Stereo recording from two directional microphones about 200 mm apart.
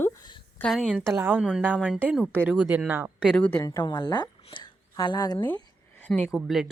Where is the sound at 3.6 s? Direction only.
20° left (ahead or behind).